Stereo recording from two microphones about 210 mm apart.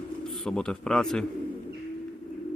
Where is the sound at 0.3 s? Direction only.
Centre (ahead or behind).